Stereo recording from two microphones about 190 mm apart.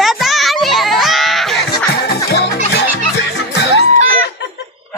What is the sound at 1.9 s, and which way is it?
Music, 55° left (ahead or behind).